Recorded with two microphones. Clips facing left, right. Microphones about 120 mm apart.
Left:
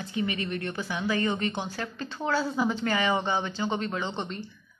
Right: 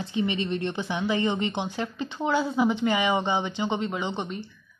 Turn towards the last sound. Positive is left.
turn(degrees=-10)  # may be behind; listen again after turning